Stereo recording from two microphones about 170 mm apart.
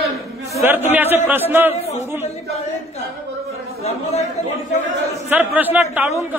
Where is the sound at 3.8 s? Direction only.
35° left (ahead or behind).